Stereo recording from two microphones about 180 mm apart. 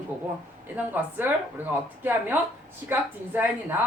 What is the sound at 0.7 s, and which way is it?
Speech, 10° right (ahead or behind).